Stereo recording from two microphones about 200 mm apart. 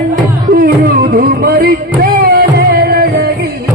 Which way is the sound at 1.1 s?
50° right (ahead or behind).